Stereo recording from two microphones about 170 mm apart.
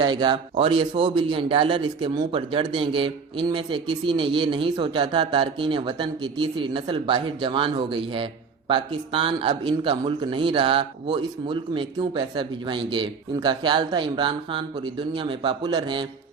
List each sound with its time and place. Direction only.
0.0 s a man's voice: 25° right (ahead or behind)